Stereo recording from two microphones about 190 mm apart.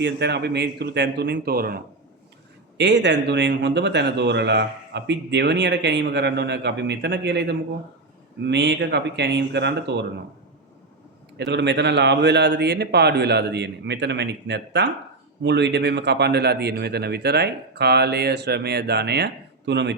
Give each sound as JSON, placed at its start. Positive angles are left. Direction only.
{"t": 0.0, "sound": "speech", "side_deg": -65}
{"t": 2.7, "sound": "speech", "side_deg": -65}
{"t": 11.3, "sound": "speech", "side_deg": -65}